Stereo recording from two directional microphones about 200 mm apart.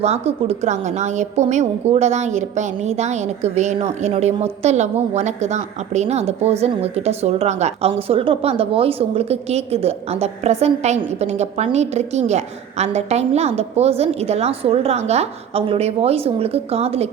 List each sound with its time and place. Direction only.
0.0 s a woman's voice: 30° right (ahead or behind)